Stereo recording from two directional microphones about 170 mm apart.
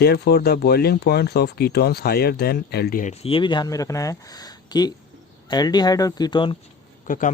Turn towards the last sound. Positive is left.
turn(degrees=50)  # may be behind; listen again after turning